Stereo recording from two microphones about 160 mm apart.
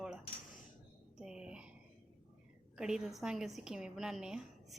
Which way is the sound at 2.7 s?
5° right (ahead or behind).